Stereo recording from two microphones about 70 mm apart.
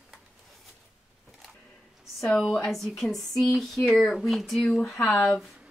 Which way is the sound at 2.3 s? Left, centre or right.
Centre.